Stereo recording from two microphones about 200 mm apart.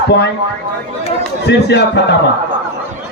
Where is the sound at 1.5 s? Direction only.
60° left (ahead or behind).